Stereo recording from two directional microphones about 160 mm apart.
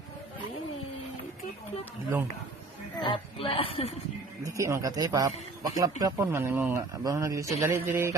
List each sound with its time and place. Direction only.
3.0 s speech: 30° left (ahead or behind)
4.4 s speech: 20° right (ahead or behind)